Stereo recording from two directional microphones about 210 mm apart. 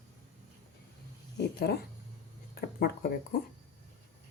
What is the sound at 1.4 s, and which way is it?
Speech, 50° left (ahead or behind).